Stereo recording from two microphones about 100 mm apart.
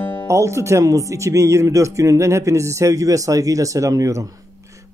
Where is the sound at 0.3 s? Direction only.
30° right (ahead or behind).